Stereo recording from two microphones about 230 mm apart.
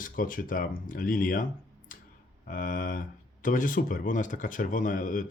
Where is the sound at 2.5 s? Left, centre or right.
Left.